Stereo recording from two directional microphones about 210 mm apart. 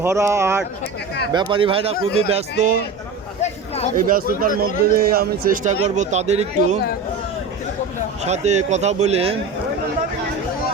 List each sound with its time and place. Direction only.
0.0 s speech: 15° right (ahead or behind); by 2.7 s 30° right (ahead or behind)
3.9 s a man's voice: 45° right (ahead or behind)
8.2 s speech: 30° right (ahead or behind)